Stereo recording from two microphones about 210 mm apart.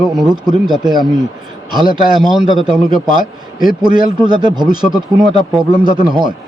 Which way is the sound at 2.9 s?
40° left (ahead or behind).